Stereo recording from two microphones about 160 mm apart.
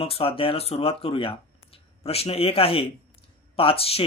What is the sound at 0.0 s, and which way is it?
Speech, 35° left (ahead or behind).